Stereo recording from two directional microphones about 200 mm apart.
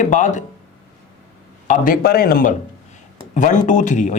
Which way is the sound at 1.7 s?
45° left (ahead or behind).